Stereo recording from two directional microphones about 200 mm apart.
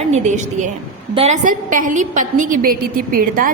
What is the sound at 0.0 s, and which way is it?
A woman's voice, 35° right (ahead or behind).